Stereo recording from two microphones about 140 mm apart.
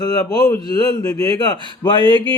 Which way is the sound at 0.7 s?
30° left (ahead or behind).